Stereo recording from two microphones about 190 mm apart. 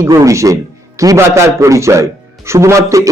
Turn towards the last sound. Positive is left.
turn(degrees=-15)  # may be behind; listen again after turning